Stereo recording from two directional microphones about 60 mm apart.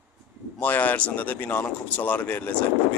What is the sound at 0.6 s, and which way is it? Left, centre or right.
Speech, left.